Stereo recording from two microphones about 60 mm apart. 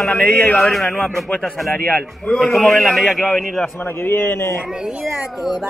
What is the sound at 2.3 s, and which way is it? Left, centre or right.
Speech, centre.